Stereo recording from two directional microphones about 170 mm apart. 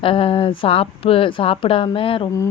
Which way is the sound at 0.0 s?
30° left (ahead or behind).